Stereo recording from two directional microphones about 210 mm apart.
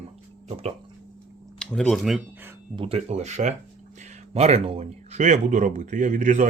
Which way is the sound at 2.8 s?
30° right (ahead or behind).